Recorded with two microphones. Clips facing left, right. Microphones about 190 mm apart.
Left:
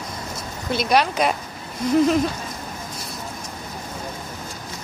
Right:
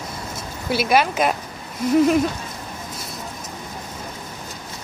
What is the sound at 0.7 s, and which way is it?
Speech, 5° right (ahead or behind).